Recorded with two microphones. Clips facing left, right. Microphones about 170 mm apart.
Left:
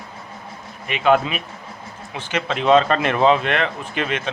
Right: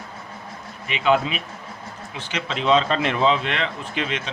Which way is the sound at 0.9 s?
50° left (ahead or behind).